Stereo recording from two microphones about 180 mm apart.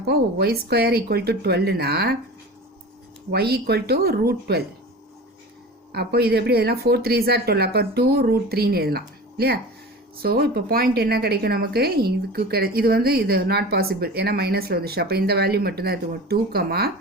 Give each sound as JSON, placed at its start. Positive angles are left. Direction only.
{"t": 0.0, "sound": "a woman's voice", "side_deg": -60}
{"t": 3.3, "sound": "a woman's voice", "side_deg": -60}
{"t": 5.9, "sound": "a woman's voice", "side_deg": -60}